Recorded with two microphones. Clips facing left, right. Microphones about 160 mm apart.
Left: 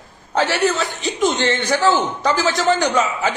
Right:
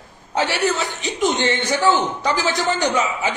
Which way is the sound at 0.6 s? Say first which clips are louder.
Left 2 dB; 15° right (ahead or behind).